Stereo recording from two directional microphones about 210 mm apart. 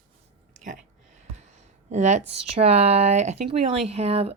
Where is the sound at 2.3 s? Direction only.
30° right (ahead or behind).